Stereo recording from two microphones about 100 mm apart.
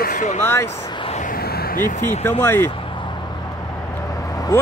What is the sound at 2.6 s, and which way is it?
Vehicle, 55° left (ahead or behind).